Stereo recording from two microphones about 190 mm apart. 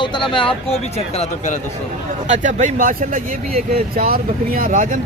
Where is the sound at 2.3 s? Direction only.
40° right (ahead or behind).